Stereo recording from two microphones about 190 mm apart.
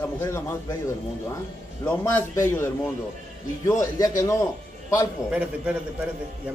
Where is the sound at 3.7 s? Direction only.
15° left (ahead or behind).